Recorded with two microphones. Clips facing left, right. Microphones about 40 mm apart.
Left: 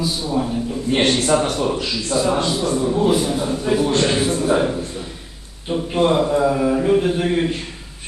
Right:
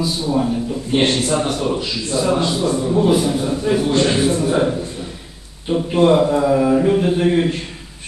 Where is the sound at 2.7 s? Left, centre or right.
Centre.